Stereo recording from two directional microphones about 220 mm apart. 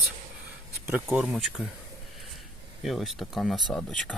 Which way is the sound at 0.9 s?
5° right (ahead or behind).